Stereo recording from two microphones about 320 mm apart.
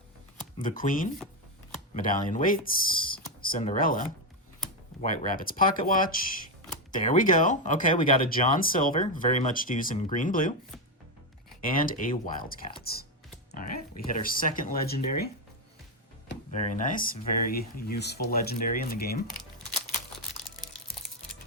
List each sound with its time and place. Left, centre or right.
0.8 s speech: left
11.6 s speech: left
16.5 s speech: left